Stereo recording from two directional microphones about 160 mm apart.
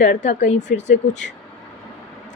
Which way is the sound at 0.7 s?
90° left.